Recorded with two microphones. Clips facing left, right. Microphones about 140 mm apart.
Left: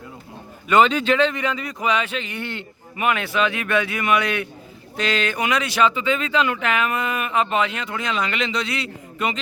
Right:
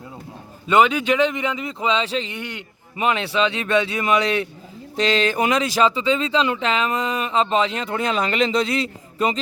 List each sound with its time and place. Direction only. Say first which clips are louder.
0.7 s a man's voice: even; 10° right (ahead or behind); by 2.3 s 30° right (ahead or behind)
2.3 s a man's voice: left 2 dB; 15° right (ahead or behind)
3.0 s a man's voice: right 1 dB; 30° right (ahead or behind)